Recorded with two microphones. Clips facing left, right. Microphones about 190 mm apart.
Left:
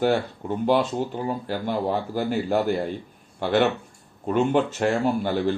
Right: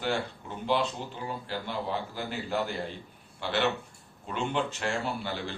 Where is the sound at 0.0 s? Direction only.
45° left (ahead or behind).